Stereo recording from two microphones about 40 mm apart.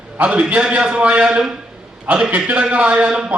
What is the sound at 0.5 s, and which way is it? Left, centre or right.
A man's voice, right.